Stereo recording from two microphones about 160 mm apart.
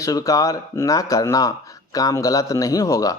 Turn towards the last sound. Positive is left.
turn(degrees=20)  # may be behind; listen again after turning